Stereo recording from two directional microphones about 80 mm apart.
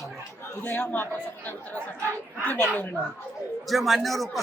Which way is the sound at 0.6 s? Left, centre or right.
Left.